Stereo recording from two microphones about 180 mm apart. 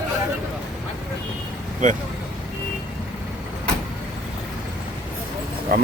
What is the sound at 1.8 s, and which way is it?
Speech, 45° right (ahead or behind).